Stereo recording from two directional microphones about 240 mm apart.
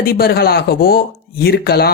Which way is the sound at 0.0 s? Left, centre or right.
Left.